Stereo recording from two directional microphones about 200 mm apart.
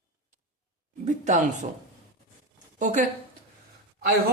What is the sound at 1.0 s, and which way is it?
Speech, 35° right (ahead or behind).